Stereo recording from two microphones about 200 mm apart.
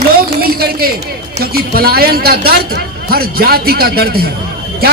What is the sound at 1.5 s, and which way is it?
A man's voice, 50° right (ahead or behind).